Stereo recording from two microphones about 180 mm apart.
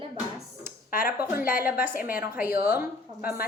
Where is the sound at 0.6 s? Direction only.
50° left (ahead or behind).